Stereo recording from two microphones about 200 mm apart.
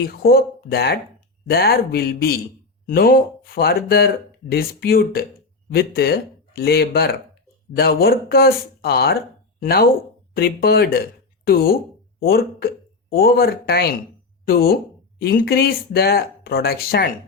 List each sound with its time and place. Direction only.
0.0 s speech: 50° left (ahead or behind)